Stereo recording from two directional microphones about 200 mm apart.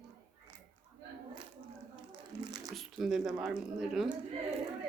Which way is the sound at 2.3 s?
20° right (ahead or behind).